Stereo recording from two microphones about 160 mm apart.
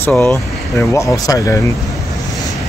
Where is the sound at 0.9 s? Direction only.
20° left (ahead or behind).